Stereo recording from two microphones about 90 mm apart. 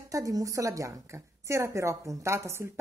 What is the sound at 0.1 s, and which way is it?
A woman's voice, 40° right (ahead or behind).